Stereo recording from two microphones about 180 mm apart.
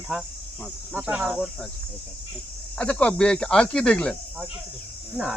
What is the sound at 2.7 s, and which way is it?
Speech, 5° left (ahead or behind).